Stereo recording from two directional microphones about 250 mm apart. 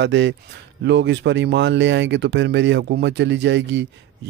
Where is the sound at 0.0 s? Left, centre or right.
Right.